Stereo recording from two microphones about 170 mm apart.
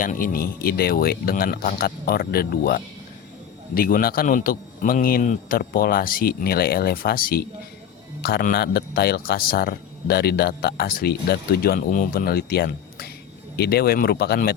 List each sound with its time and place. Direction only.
0.0 s a man's voice: 55° left (ahead or behind)